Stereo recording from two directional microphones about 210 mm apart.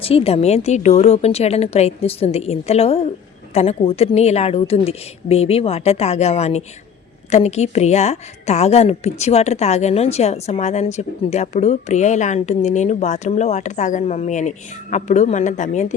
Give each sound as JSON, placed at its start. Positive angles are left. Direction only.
{"t": 0.0, "sound": "a woman's voice", "side_deg": 25}